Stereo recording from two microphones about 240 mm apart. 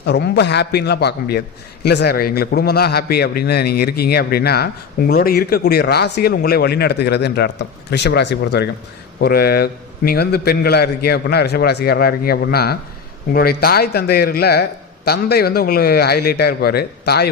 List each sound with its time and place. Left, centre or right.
0.0 s a man's voice: left